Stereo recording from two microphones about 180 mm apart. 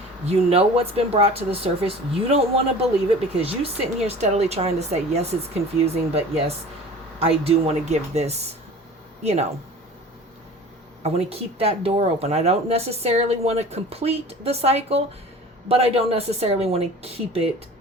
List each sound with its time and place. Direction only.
0.3 s a woman's voice: 35° right (ahead or behind)
11.0 s a woman's voice: 35° right (ahead or behind)